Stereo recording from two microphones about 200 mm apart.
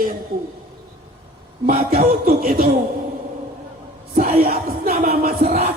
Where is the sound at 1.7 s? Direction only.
45° right (ahead or behind).